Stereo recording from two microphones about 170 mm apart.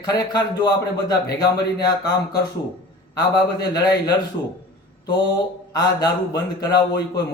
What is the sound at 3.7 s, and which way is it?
Speech, 25° left (ahead or behind).